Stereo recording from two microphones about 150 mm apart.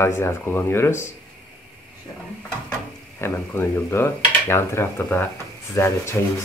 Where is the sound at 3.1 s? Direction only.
15° left (ahead or behind).